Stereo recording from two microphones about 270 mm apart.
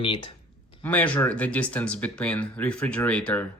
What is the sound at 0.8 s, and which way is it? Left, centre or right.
Speech, centre.